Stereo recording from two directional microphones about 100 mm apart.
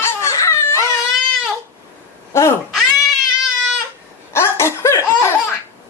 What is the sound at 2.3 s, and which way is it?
Cat, 25° left (ahead or behind).